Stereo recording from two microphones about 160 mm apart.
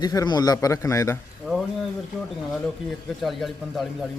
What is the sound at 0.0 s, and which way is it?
A man's voice, 25° left (ahead or behind).